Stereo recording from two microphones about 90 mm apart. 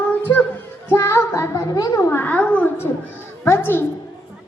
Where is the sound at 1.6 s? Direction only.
45° left (ahead or behind).